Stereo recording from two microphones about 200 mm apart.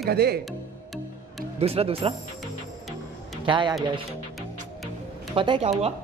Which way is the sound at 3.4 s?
25° right (ahead or behind).